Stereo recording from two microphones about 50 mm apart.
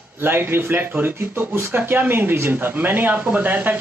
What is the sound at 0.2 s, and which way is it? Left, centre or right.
Speech, right.